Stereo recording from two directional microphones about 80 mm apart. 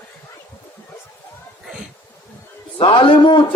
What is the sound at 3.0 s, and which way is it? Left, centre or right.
Speech, left.